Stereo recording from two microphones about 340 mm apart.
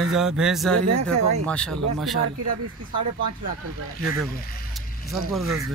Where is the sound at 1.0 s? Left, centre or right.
Right.